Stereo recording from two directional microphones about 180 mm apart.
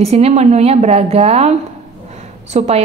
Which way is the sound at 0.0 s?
35° right (ahead or behind).